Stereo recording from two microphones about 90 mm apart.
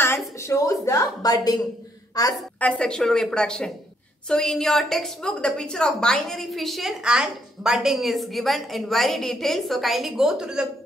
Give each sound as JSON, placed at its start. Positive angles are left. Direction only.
{"t": 0.4, "sound": "a woman's voice", "side_deg": 35}
{"t": 2.6, "sound": "a woman's voice", "side_deg": 10}